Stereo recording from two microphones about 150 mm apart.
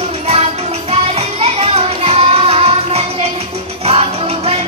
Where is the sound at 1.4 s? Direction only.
40° right (ahead or behind).